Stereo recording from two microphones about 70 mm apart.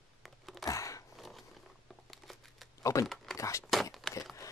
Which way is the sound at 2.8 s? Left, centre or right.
Left.